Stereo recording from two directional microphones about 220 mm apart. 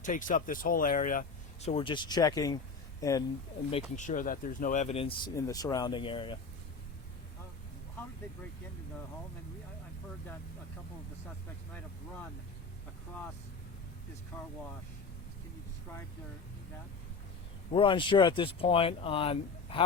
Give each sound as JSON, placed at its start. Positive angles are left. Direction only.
{"t": 0.0, "sound": "speech", "side_deg": 35}
{"t": 1.6, "sound": "speech", "side_deg": 25}
{"t": 3.7, "sound": "speech", "side_deg": 30}
{"t": 5.3, "sound": "speech", "side_deg": 15}
{"t": 17.7, "sound": "speech", "side_deg": 25}